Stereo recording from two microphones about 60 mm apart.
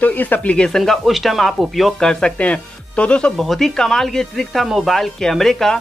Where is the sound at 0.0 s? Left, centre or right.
Left.